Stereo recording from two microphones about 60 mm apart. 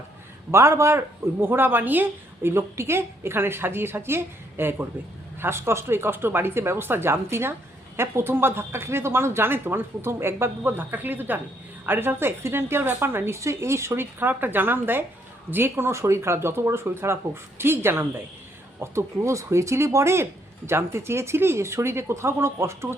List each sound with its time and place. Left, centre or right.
0.5 s a woman's voice: right
2.5 s a woman's voice: right
10.6 s a woman's voice: right
18.8 s speech: right